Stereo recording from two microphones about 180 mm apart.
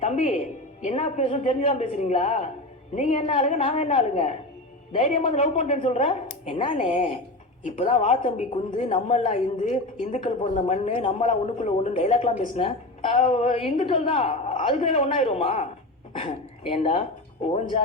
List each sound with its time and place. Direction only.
0.0 s a woman's voice: 35° left (ahead or behind)
5.8 s a woman's voice: 30° left (ahead or behind)
6.7 s a woman's voice: 40° left (ahead or behind)
8.4 s a woman's voice: 25° left (ahead or behind); by 10.2 s 45° left (ahead or behind)
10.2 s a woman's voice: 35° left (ahead or behind)